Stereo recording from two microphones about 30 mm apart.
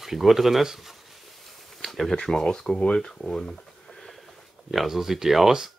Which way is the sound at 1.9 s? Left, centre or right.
Centre.